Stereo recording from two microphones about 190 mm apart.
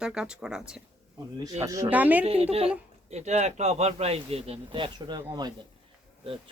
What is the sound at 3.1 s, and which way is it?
Speech, 35° right (ahead or behind).